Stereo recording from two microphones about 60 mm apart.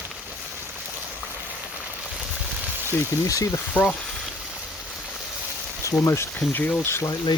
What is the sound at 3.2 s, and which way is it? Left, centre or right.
Speech, left.